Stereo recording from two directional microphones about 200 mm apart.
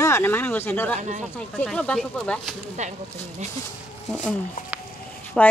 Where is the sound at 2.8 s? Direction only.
35° right (ahead or behind).